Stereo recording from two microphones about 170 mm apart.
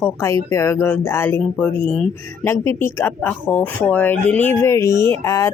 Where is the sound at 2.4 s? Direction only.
15° left (ahead or behind).